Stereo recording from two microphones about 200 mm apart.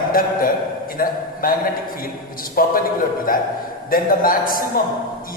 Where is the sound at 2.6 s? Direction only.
45° left (ahead or behind).